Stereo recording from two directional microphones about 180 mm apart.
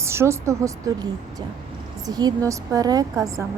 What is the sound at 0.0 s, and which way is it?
Speech, 15° right (ahead or behind).